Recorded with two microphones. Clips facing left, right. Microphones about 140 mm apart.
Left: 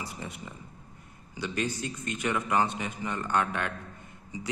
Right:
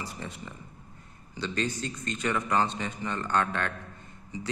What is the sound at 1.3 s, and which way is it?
A man's voice, 10° left (ahead or behind).